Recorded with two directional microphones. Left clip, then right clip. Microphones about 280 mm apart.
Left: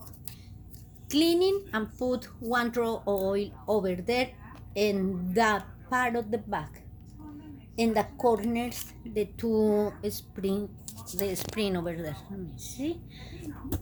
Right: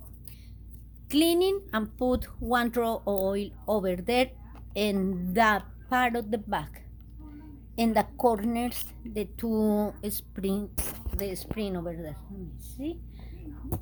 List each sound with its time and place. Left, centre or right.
1.0 s speech: right
7.8 s speech: right
11.2 s speech: centre